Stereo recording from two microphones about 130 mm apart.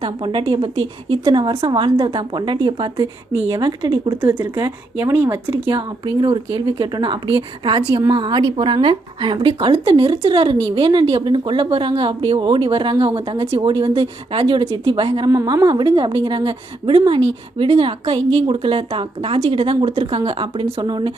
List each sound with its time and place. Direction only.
0.0 s speech: 40° right (ahead or behind)
4.2 s speech: 15° right (ahead or behind)
5.7 s speech: 35° right (ahead or behind)
15.3 s a woman's voice: 25° right (ahead or behind)
15.9 s speech: 40° right (ahead or behind)
20.8 s speech: 35° right (ahead or behind)